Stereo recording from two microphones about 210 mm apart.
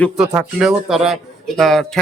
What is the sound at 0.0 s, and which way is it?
A man's voice, centre (ahead or behind).